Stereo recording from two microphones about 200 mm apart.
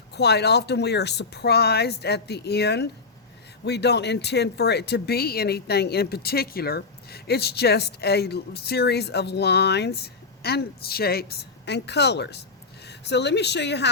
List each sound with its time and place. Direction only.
0.1 s speech: 55° left (ahead or behind)